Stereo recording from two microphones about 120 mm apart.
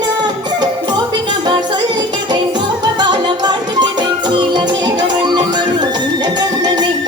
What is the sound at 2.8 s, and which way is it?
Music, 40° right (ahead or behind).